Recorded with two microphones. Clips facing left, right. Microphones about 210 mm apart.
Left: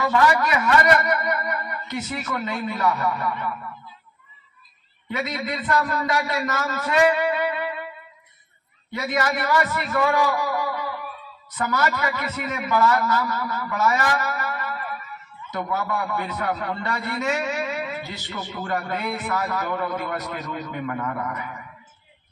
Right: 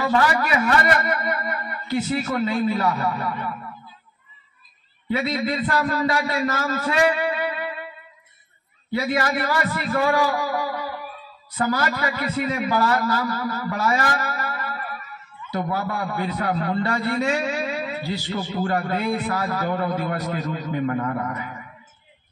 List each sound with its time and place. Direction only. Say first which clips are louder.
0.1 s a man's voice: left 1 dB; 35° right (ahead or behind)
5.0 s a man's voice: right 5 dB; 35° right (ahead or behind)
8.9 s a man's voice: right 2 dB; 30° right (ahead or behind)